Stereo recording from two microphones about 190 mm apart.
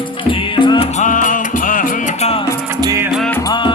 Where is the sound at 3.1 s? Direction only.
Centre (ahead or behind).